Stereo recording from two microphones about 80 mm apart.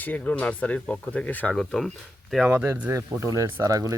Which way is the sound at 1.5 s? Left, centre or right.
Centre.